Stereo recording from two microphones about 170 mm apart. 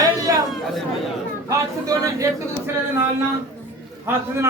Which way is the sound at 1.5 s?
20° right (ahead or behind).